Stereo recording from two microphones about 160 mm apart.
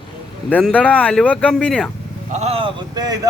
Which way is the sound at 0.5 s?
10° left (ahead or behind).